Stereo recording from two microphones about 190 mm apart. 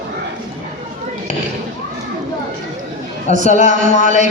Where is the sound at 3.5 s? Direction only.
40° left (ahead or behind).